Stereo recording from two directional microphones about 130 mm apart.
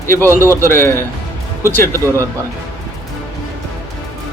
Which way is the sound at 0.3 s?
20° left (ahead or behind).